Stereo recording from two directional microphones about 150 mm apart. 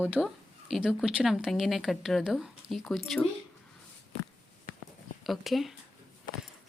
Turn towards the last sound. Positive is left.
turn(degrees=0)  # may be behind; listen again after turning